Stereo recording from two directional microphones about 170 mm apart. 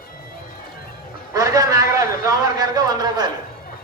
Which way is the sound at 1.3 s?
20° right (ahead or behind).